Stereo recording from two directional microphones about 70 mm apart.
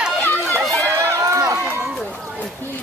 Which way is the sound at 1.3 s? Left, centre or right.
Right.